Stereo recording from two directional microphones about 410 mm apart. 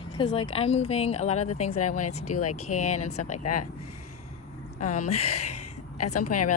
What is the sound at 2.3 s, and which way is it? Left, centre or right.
Speech, left.